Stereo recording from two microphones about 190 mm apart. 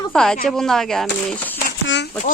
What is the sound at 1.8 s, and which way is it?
Speech, 65° left (ahead or behind).